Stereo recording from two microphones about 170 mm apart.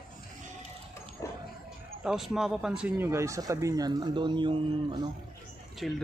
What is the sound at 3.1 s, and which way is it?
A man's voice, 15° right (ahead or behind).